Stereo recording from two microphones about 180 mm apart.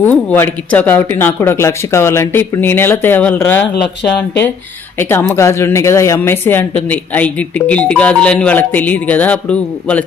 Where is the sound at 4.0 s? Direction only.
70° left (ahead or behind).